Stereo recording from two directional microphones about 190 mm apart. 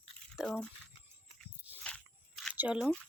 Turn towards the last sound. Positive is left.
turn(degrees=0)  # may be behind; listen again after turning